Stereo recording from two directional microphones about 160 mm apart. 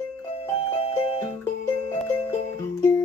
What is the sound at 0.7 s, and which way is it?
Music, 35° left (ahead or behind).